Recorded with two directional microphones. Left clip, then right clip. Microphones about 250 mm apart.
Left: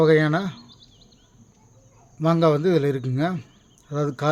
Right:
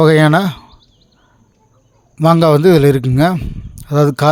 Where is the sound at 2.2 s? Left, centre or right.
Right.